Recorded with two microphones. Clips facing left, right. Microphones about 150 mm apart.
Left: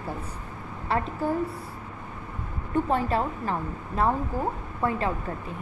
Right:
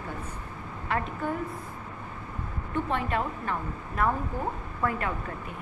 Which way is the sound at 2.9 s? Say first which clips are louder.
Left 3 dB; 35° left (ahead or behind).